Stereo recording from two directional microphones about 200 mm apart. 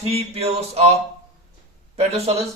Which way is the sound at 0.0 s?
30° right (ahead or behind).